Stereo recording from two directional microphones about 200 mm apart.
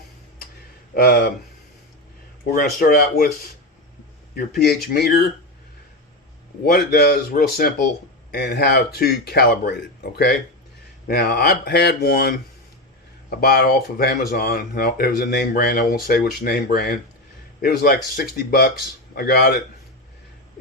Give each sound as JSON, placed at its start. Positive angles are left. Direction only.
{"t": 0.9, "sound": "speech", "side_deg": 50}
{"t": 2.5, "sound": "speech", "side_deg": 45}
{"t": 4.4, "sound": "speech", "side_deg": 50}
{"t": 6.7, "sound": "speech", "side_deg": 50}
{"t": 13.4, "sound": "speech", "side_deg": 50}